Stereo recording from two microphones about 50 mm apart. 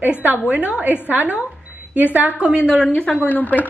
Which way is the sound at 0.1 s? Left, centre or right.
Right.